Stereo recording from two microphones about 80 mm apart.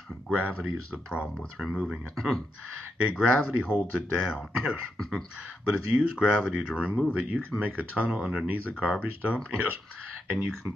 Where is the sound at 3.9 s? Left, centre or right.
Centre.